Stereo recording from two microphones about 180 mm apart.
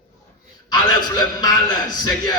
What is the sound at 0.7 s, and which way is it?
A man's voice, 20° left (ahead or behind).